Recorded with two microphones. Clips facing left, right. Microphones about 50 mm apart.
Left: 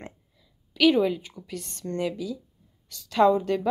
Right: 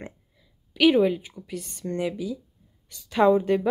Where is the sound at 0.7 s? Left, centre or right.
Centre.